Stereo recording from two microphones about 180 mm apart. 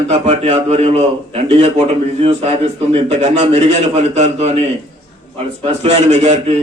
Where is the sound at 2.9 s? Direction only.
35° right (ahead or behind).